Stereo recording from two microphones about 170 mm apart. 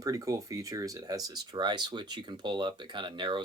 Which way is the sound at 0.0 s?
20° right (ahead or behind).